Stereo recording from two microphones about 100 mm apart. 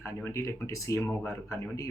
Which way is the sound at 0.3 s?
30° left (ahead or behind).